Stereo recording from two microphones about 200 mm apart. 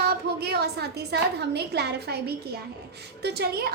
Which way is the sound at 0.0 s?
50° right (ahead or behind).